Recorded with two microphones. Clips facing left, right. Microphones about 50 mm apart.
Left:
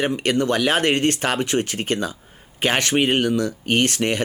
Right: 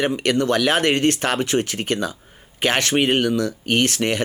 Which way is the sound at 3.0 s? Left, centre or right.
Centre.